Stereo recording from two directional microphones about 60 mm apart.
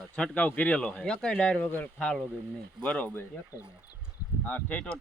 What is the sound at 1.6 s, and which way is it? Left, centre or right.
Speech, left.